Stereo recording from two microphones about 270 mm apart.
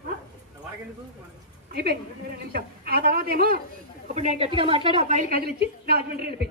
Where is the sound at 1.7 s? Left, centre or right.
Right.